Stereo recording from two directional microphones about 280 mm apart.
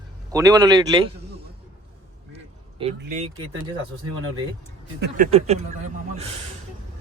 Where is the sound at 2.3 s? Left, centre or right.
Right.